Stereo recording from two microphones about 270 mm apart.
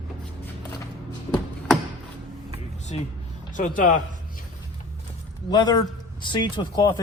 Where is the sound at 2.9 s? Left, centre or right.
Left.